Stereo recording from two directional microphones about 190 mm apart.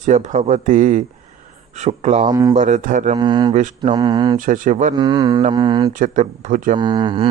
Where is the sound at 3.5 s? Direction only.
40° right (ahead or behind).